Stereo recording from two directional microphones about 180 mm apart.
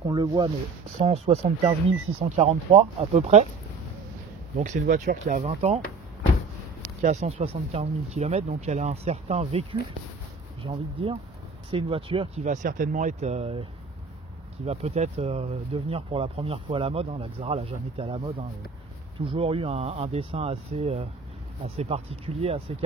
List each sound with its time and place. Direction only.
0.1 s speech: 25° right (ahead or behind)
0.9 s speech: 35° right (ahead or behind)
4.6 s speech: 45° right (ahead or behind)
7.0 s speech: 40° right (ahead or behind)
12.4 s speech: 45° right (ahead or behind)
14.7 s speech: 35° right (ahead or behind)